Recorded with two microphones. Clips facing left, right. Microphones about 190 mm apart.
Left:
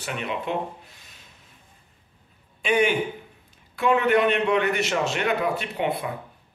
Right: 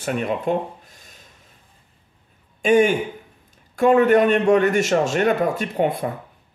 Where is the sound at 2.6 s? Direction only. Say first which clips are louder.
Right 6 dB; 45° right (ahead or behind).